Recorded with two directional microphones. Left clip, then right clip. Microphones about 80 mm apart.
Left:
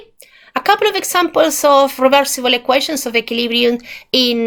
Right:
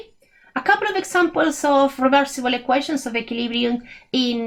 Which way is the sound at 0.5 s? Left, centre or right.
Left.